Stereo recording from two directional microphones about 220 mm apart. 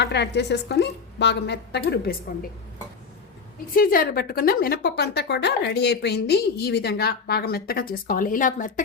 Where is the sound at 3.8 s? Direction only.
40° left (ahead or behind).